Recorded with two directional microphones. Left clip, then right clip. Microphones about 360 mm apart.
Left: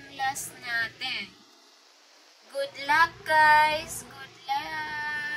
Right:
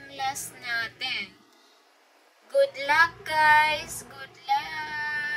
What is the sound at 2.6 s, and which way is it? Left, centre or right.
Child singing, centre.